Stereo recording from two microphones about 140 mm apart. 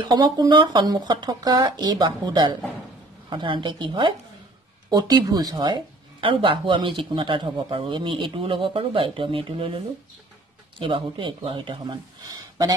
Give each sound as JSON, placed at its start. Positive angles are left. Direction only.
{"t": 0.0, "sound": "speech", "side_deg": -30}
{"t": 10.8, "sound": "speech", "side_deg": -35}